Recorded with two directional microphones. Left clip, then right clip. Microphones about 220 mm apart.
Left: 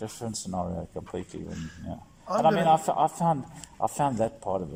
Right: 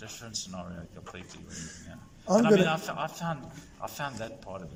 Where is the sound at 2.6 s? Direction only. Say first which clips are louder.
Left 7 dB; 35° left (ahead or behind).